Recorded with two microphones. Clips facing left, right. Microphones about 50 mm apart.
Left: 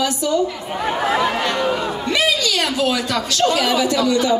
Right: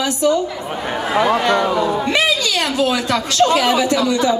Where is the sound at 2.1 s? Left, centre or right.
Right.